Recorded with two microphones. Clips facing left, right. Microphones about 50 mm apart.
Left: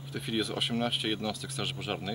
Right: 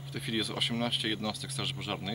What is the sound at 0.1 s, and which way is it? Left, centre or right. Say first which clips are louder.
Speech: left 2 dB; centre.